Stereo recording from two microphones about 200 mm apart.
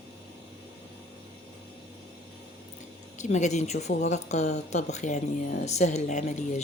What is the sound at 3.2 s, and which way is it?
Speech, 35° left (ahead or behind).